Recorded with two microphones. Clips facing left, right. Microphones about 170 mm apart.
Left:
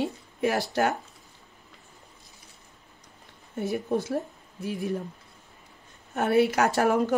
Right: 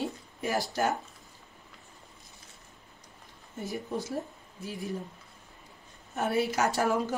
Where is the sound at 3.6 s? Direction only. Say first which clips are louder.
Left 8 dB; 60° left (ahead or behind).